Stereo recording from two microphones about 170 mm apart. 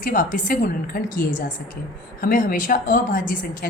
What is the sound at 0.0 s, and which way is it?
A woman's voice, 55° left (ahead or behind).